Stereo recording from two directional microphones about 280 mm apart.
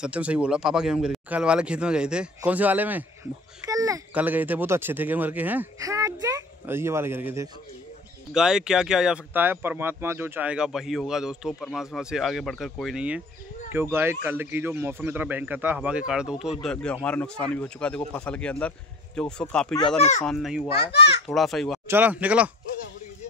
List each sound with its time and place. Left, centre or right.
0.0 s a child's voice: centre
20.0 s speech: left
20.2 s speech: centre
20.6 s a child's voice: left
21.3 s speech: centre